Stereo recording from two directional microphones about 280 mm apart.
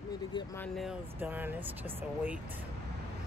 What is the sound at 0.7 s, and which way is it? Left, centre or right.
Speech, centre.